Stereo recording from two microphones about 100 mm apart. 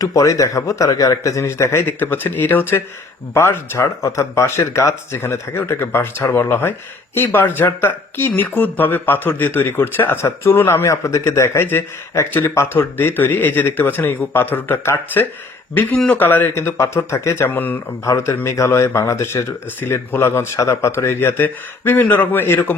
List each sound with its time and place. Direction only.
0.0 s speech: 35° left (ahead or behind)